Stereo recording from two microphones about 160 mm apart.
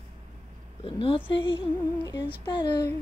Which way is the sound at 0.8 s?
35° left (ahead or behind).